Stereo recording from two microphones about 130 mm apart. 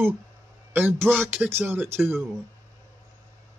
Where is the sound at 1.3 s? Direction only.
15° right (ahead or behind).